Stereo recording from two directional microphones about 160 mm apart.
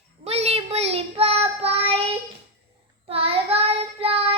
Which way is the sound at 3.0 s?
35° right (ahead or behind).